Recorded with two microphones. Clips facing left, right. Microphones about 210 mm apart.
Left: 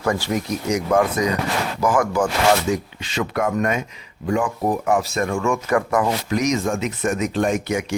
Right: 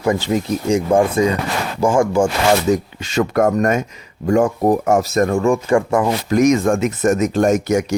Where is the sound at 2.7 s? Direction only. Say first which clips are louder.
Right 6 dB; 45° right (ahead or behind); by 6.3 s 30° right (ahead or behind).